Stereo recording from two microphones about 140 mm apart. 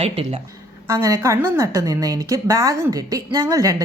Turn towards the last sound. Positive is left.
turn(degrees=-25)  # may be behind; listen again after turning